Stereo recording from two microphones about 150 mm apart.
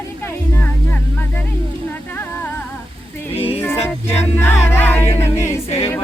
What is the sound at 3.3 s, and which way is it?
Music, 40° left (ahead or behind).